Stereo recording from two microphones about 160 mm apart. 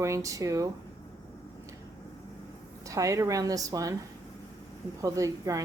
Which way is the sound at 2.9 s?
20° right (ahead or behind).